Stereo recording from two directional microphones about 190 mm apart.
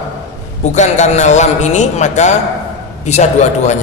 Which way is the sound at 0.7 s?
40° left (ahead or behind).